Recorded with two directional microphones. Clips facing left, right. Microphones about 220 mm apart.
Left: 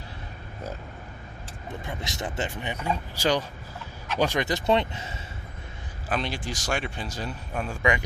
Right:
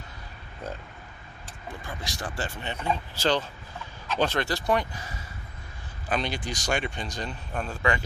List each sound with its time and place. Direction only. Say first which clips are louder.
1.8 s speech: left 3 dB; 20° left (ahead or behind)
6.1 s a man's voice: even; centre (ahead or behind)